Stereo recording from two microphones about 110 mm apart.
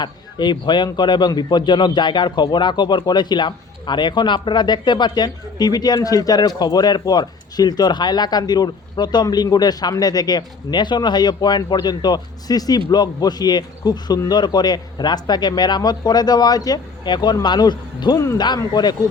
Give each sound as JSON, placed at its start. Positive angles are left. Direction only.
{"t": 0.0, "sound": "speech", "side_deg": 45}